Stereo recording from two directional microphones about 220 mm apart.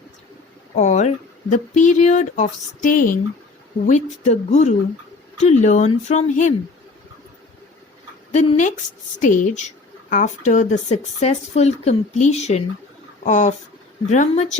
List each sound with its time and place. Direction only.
0.8 s speech: 30° left (ahead or behind)
8.3 s speech: 35° left (ahead or behind)